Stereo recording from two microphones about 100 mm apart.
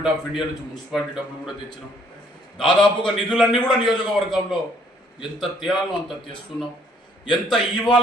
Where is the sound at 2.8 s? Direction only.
5° left (ahead or behind).